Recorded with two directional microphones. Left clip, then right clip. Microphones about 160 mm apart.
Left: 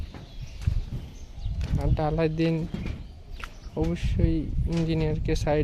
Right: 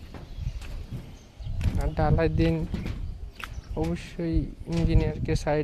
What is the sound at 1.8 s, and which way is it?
Speech, 5° left (ahead or behind).